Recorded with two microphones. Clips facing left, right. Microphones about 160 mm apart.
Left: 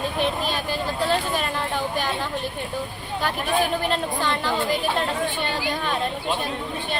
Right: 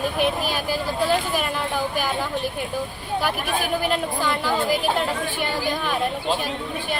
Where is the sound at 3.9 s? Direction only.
10° right (ahead or behind).